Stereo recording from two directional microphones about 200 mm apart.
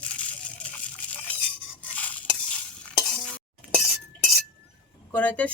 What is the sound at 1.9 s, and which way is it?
Stir, 5° left (ahead or behind).